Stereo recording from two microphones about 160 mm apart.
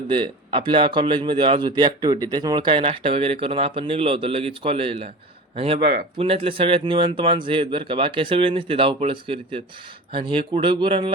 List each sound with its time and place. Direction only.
0.1 s speech: 30° right (ahead or behind)
5.8 s speech: 65° right (ahead or behind)
6.1 s speech: 35° right (ahead or behind)